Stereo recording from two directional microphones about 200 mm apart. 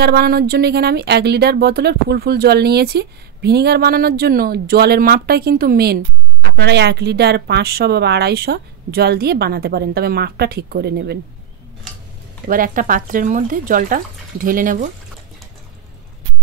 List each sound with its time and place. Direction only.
0.0 s speech: 50° right (ahead or behind)
12.4 s speech: 45° right (ahead or behind)